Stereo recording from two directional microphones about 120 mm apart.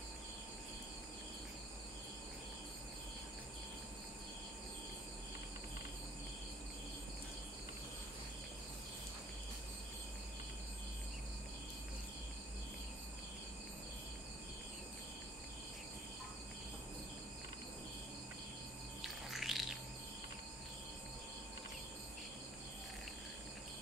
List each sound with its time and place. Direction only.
18.9 s bird: centre (ahead or behind)